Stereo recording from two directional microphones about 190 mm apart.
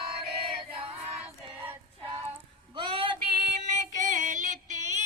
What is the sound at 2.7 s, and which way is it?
Female singing, 25° right (ahead or behind).